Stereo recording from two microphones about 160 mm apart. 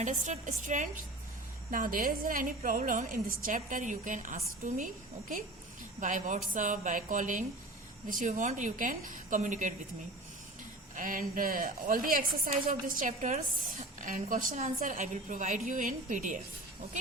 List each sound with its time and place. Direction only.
0.0 s a woman's voice: 50° right (ahead or behind)
6.0 s a woman's voice: 55° right (ahead or behind)
10.9 s a woman's voice: 60° right (ahead or behind)